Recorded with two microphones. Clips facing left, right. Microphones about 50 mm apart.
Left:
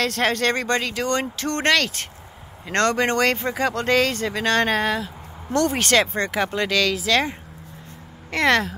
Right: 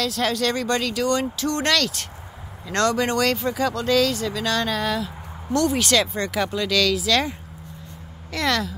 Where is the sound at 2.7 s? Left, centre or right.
Left.